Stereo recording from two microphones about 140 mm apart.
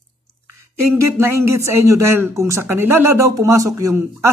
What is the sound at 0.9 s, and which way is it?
Speech, 20° right (ahead or behind).